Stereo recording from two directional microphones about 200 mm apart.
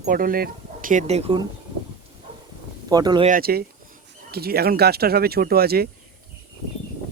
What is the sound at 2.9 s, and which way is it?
Speech, 20° right (ahead or behind).